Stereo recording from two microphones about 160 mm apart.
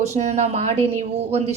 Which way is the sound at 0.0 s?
45° right (ahead or behind).